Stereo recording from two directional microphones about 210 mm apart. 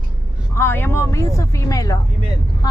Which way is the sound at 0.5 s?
10° left (ahead or behind).